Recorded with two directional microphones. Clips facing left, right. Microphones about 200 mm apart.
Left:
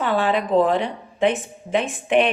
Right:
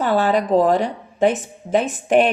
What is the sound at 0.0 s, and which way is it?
A woman's voice, 40° right (ahead or behind).